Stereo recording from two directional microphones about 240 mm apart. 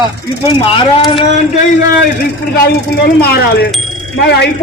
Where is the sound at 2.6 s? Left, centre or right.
Left.